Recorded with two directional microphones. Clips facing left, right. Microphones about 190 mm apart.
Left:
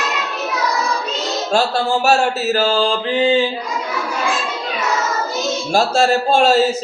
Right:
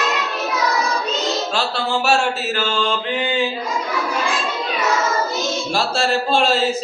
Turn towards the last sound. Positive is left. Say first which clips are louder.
# left 4 dB
turn(degrees=45)  # may be behind; listen again after turning